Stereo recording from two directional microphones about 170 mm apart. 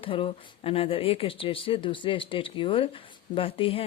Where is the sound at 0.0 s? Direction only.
30° left (ahead or behind).